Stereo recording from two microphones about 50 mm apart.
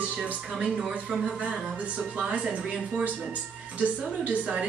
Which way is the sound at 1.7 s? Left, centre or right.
Right.